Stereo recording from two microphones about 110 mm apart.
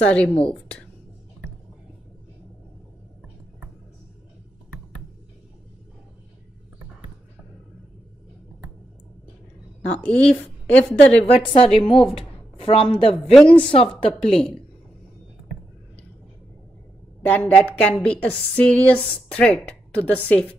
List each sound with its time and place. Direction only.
0.0 s a woman's voice: 10° left (ahead or behind)
9.8 s a woman's voice: 10° left (ahead or behind)
11.5 s a woman's voice: 55° left (ahead or behind)
13.1 s a woman's voice: centre (ahead or behind)
13.5 s a woman's voice: 55° left (ahead or behind)
14.2 s a woman's voice: 5° left (ahead or behind)
17.2 s a woman's voice: 15° left (ahead or behind)